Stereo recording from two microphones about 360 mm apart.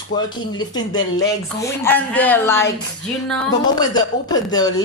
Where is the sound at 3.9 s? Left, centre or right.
Centre.